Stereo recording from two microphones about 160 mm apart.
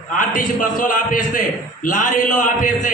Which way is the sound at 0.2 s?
55° left (ahead or behind).